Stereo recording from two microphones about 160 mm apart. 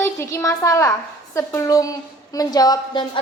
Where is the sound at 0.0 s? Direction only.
15° left (ahead or behind).